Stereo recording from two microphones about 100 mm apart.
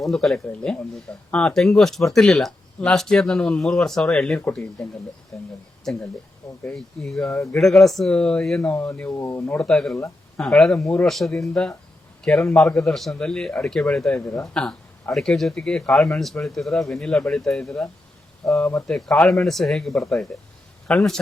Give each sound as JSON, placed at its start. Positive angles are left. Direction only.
{"t": 0.0, "sound": "speech", "side_deg": 5}
{"t": 7.3, "sound": "speech", "side_deg": 30}
{"t": 7.5, "sound": "speech", "side_deg": 5}
{"t": 9.1, "sound": "speech", "side_deg": 25}
{"t": 9.6, "sound": "a man's voice", "side_deg": 5}
{"t": 14.3, "sound": "speech", "side_deg": 30}
{"t": 14.5, "sound": "speech", "side_deg": 5}
{"t": 18.6, "sound": "speech", "side_deg": 25}
{"t": 18.9, "sound": "a man's voice", "side_deg": 5}